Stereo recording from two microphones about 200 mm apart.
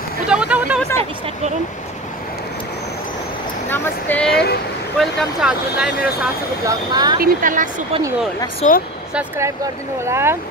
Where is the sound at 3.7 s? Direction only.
10° left (ahead or behind).